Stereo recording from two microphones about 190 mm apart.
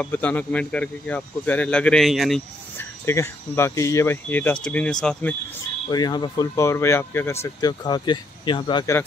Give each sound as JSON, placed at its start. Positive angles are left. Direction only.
{"t": 0.0, "sound": "speech", "side_deg": 10}
{"t": 3.1, "sound": "speech", "side_deg": 15}
{"t": 5.9, "sound": "speech", "side_deg": 20}